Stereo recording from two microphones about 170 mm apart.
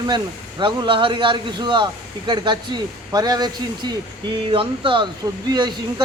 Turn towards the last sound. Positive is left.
turn(degrees=-25)  # may be behind; listen again after turning